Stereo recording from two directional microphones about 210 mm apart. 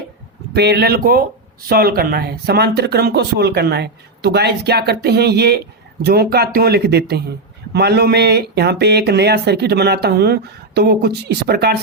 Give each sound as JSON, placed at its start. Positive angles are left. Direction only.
{"t": 0.5, "sound": "speech", "side_deg": -50}